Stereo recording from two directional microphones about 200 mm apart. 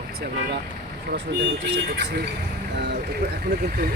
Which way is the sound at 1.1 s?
60° right (ahead or behind).